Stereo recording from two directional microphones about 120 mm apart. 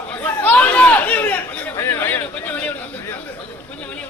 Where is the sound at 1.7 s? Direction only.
20° left (ahead or behind).